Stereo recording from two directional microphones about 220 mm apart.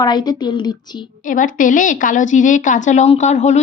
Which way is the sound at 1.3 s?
35° left (ahead or behind).